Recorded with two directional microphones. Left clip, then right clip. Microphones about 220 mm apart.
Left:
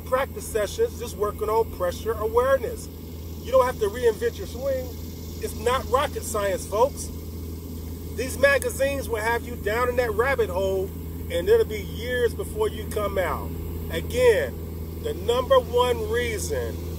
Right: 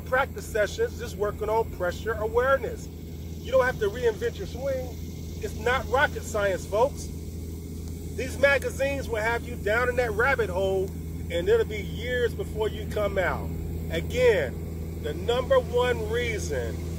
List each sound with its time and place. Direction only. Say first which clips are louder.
0.1 s speech: left 1 dB; 5° left (ahead or behind)
5.6 s speech: left 1 dB; 10° left (ahead or behind)
8.2 s speech: left 2 dB; 5° left (ahead or behind)